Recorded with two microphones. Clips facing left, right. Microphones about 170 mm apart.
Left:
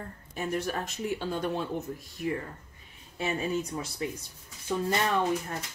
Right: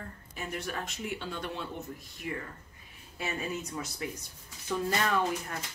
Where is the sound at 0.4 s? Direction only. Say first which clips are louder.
Left 6 dB; 40° left (ahead or behind).